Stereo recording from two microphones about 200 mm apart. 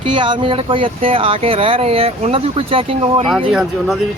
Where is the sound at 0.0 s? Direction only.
25° right (ahead or behind).